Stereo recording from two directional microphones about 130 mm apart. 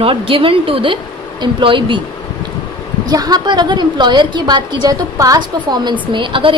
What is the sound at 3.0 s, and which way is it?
A woman's voice, 30° right (ahead or behind).